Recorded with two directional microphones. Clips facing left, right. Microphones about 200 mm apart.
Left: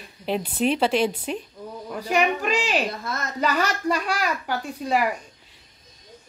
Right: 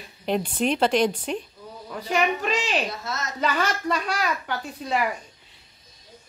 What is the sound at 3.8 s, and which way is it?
Speech, 10° left (ahead or behind).